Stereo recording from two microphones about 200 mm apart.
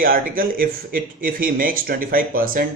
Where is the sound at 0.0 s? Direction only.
45° right (ahead or behind).